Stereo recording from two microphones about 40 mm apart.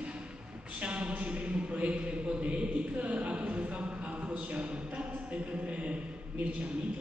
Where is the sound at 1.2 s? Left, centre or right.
Right.